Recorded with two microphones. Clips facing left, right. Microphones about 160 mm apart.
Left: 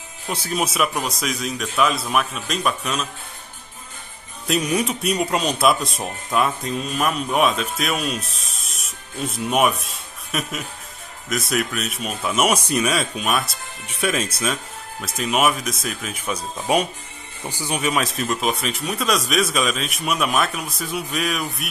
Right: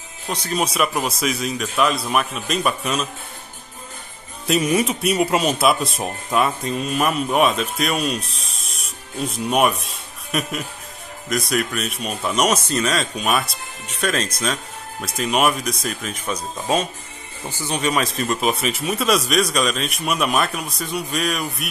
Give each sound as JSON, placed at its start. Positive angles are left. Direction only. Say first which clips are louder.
{"t": 0.3, "sound": "speech", "louder": "right 1 dB", "side_deg": 5}
{"t": 4.5, "sound": "speech", "louder": "right 3 dB", "side_deg": 0}
{"t": 17.5, "sound": "speech", "louder": "right 1 dB", "side_deg": 10}